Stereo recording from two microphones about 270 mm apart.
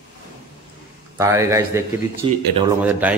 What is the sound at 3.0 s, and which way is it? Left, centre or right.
Speech, centre.